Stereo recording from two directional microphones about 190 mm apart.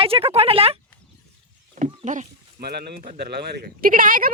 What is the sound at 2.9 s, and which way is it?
Speech, 30° right (ahead or behind).